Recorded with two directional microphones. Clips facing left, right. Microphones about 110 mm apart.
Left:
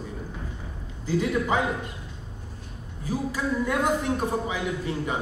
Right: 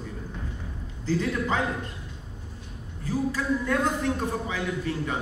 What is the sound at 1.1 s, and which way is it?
Speech, 15° left (ahead or behind).